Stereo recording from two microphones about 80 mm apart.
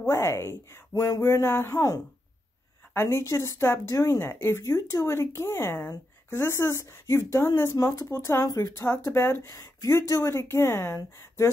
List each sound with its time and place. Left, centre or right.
0.0 s speech: left
9.5 s speech: left